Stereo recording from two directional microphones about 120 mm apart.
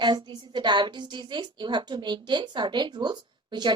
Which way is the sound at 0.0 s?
35° right (ahead or behind).